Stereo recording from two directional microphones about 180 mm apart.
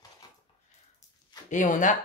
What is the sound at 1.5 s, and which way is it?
Speech, 45° left (ahead or behind).